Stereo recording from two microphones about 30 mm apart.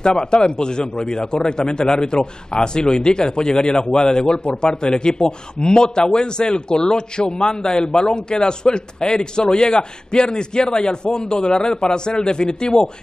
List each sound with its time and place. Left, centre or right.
0.0 s a man's voice: left